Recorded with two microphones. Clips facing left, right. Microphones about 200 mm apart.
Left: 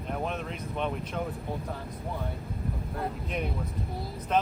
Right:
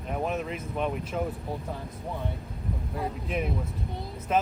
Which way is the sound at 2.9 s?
Centre (ahead or behind).